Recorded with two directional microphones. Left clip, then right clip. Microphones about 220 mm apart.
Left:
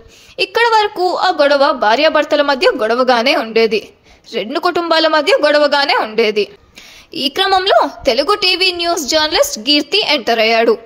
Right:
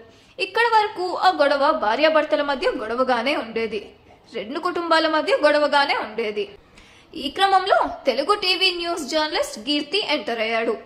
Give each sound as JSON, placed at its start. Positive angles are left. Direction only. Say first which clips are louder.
{"t": 0.4, "sound": "a woman's voice", "louder": "left 6 dB", "side_deg": 35}